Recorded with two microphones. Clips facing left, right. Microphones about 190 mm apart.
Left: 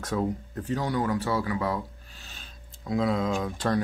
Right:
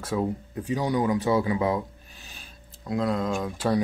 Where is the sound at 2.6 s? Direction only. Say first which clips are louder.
Even; centre (ahead or behind).